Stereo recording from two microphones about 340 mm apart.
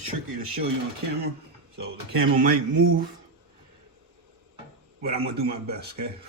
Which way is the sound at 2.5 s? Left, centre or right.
Right.